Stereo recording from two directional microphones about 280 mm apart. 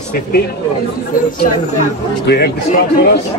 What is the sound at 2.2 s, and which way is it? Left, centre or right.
Speech, left.